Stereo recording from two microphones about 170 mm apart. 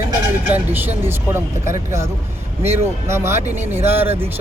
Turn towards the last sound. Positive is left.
turn(degrees=-10)  # may be behind; listen again after turning